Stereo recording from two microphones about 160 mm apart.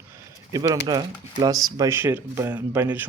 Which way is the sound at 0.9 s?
25° right (ahead or behind).